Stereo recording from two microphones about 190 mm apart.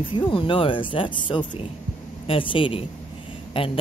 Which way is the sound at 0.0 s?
25° left (ahead or behind).